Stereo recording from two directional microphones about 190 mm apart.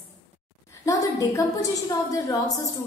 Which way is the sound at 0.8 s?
15° left (ahead or behind).